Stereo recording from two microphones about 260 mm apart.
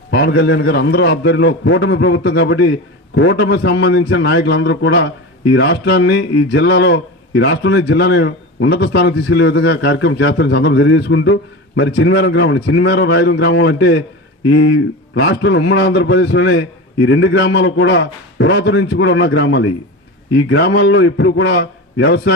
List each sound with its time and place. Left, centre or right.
0.1 s a man's voice: left